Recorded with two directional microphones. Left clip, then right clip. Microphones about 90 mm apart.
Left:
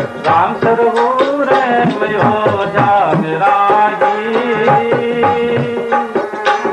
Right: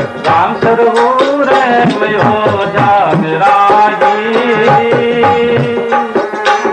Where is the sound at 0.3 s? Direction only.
40° left (ahead or behind).